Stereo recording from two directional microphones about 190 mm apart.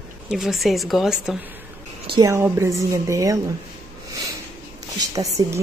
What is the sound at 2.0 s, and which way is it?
A woman's voice, 20° right (ahead or behind).